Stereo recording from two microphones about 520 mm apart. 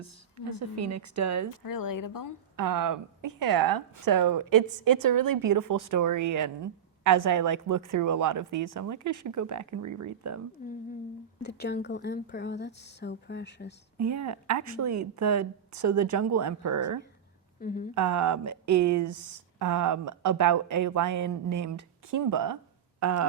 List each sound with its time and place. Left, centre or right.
0.0 s speech: right
1.6 s speech: left
2.6 s speech: right
11.4 s speech: centre
14.0 s speech: right
17.6 s speech: centre
17.9 s speech: right